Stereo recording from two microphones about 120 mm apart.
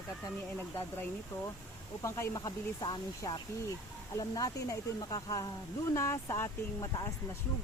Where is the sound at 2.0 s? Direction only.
25° left (ahead or behind).